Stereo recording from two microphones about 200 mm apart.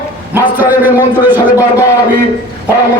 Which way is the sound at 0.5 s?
10° right (ahead or behind).